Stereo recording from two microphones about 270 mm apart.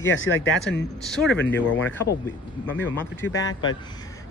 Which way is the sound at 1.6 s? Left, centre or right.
Left.